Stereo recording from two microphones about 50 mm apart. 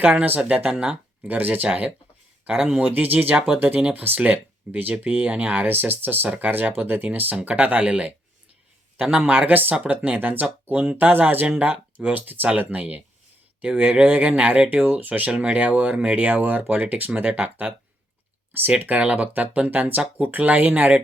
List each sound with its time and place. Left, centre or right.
0.0 s speech: right
1.3 s speech: right
2.5 s speech: centre
2.8 s speech: right
5.6 s speech: right
10.9 s speech: right
18.7 s speech: right
19.1 s speech: right